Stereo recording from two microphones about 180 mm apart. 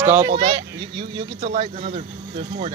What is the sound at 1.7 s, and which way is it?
Speech, 45° right (ahead or behind).